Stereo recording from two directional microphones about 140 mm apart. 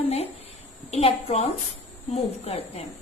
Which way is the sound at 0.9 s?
50° left (ahead or behind).